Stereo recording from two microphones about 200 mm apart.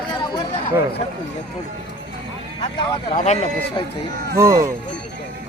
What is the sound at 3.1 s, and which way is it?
Speech, 35° left (ahead or behind).